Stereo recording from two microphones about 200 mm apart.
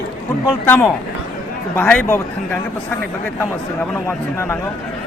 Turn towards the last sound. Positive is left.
turn(degrees=10)  # may be behind; listen again after turning